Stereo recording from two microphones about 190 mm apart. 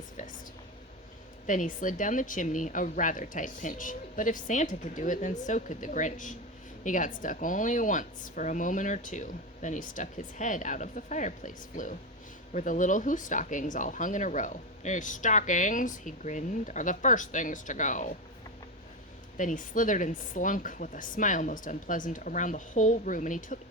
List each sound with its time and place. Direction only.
1.5 s speech: 45° left (ahead or behind)
19.4 s speech: 45° left (ahead or behind)